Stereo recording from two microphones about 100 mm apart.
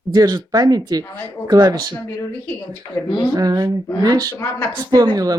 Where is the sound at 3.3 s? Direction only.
40° right (ahead or behind).